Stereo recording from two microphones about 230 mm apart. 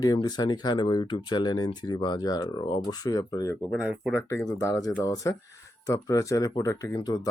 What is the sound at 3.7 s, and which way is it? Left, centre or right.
Speech, centre.